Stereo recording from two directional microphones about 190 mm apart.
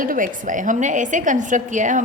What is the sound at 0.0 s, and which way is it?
A woman's voice, 45° right (ahead or behind).